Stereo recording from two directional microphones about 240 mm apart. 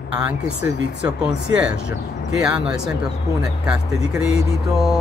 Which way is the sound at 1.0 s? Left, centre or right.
Centre.